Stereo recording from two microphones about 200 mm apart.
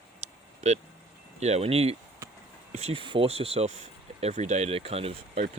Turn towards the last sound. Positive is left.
turn(degrees=-30)  # may be behind; listen again after turning